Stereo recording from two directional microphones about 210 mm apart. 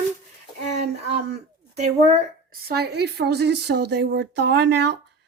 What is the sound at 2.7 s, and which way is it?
Speech, 50° right (ahead or behind).